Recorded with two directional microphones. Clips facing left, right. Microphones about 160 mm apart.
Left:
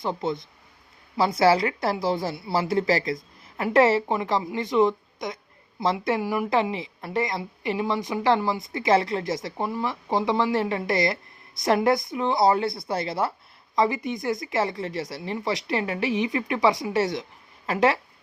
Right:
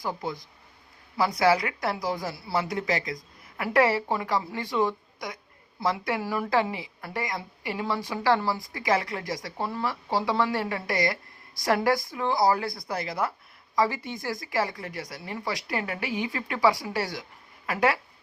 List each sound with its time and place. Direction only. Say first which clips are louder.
0.0 s a woman's voice: left 5 dB; 25° left (ahead or behind)